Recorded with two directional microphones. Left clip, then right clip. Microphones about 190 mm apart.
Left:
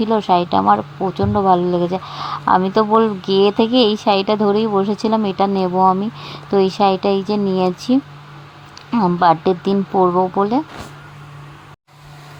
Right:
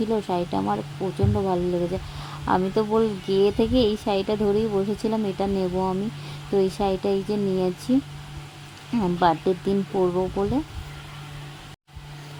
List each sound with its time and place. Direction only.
0.0 s speech: 10° left (ahead or behind)
9.0 s speech: 20° left (ahead or behind)